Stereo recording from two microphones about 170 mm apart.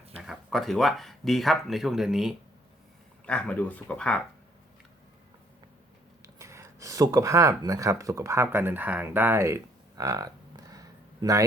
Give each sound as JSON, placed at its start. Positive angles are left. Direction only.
{"t": 0.2, "sound": "speech", "side_deg": 0}
{"t": 6.2, "sound": "speech", "side_deg": -15}